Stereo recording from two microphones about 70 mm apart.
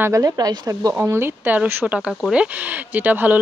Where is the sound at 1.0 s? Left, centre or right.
Right.